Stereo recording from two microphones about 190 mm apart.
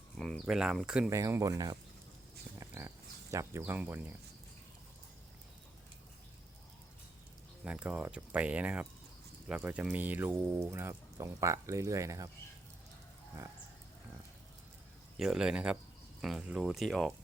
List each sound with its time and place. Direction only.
0.2 s speech: centre (ahead or behind)
1.1 s speech: 15° right (ahead or behind)
2.6 s dog: 15° right (ahead or behind)
3.3 s speech: 15° right (ahead or behind)
7.6 s speech: 5° right (ahead or behind)
15.2 s speech: 5° right (ahead or behind)